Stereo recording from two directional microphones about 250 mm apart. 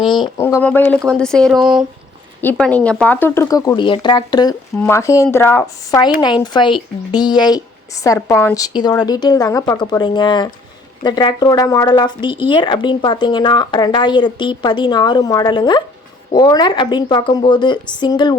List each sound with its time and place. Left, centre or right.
0.3 s speech: centre